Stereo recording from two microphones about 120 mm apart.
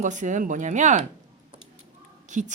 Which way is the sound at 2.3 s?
90° right.